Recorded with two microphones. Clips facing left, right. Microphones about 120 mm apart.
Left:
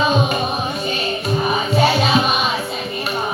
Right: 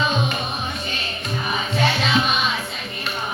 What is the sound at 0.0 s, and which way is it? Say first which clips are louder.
Music: left 5 dB; 15° left (ahead or behind).